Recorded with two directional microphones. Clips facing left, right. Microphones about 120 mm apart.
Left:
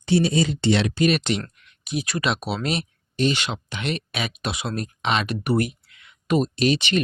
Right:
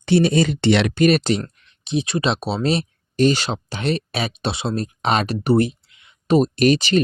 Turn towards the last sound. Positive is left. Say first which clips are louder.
# right 5 dB
turn(degrees=-40)  # may be behind; listen again after turning